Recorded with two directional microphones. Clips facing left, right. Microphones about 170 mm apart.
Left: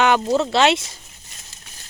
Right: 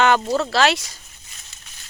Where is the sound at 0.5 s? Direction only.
25° left (ahead or behind).